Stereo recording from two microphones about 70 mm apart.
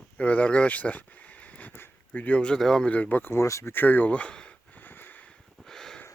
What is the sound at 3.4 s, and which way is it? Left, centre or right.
Speech, left.